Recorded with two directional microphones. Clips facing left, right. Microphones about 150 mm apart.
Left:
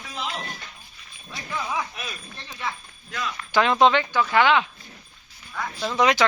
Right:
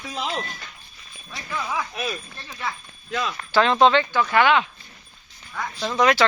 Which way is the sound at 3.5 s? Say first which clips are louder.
Right 1 dB; 15° left (ahead or behind).